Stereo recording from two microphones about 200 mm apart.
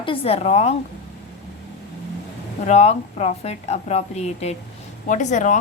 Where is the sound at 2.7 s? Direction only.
30° left (ahead or behind).